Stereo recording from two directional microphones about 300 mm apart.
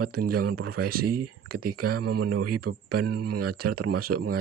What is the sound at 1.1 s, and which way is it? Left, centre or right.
Speech, right.